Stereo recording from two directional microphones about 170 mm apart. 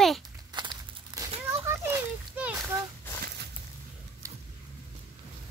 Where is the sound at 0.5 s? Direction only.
25° right (ahead or behind).